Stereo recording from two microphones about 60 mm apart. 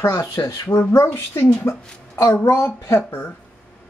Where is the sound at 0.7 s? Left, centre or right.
Left.